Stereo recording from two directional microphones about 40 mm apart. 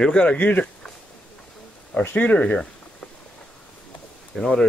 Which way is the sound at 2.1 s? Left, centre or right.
Left.